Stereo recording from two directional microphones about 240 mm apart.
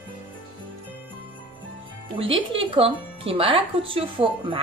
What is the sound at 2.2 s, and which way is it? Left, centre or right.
A woman's voice, right.